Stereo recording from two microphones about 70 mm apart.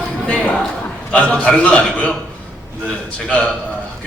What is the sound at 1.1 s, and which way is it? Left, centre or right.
A man's voice, centre.